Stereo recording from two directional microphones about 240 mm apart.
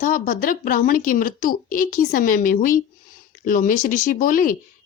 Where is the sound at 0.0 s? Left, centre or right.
Left.